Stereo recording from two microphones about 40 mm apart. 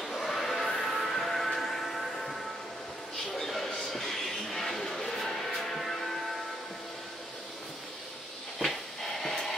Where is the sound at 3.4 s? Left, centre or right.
Centre.